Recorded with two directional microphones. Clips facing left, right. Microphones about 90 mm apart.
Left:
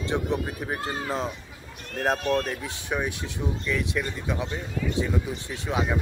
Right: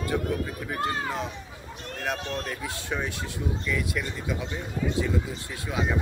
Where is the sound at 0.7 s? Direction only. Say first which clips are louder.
Right 2 dB; 35° left (ahead or behind).